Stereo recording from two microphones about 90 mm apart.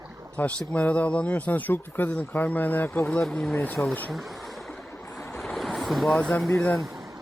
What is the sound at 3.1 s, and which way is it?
Speech, 5° left (ahead or behind).